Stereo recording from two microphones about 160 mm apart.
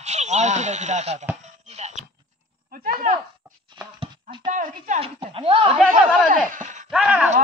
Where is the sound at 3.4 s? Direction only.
10° right (ahead or behind).